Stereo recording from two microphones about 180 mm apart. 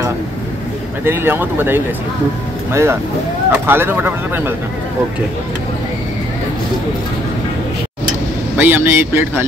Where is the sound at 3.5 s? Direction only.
10° right (ahead or behind).